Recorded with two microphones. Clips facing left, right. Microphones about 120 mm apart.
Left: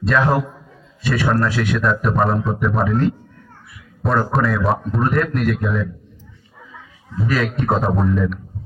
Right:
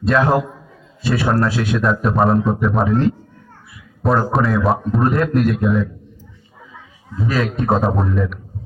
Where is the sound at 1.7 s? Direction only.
Centre (ahead or behind).